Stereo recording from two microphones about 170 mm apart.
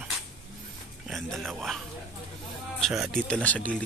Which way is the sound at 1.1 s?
Centre (ahead or behind).